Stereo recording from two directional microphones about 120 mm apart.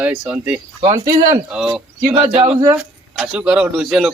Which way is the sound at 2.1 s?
60° right (ahead or behind).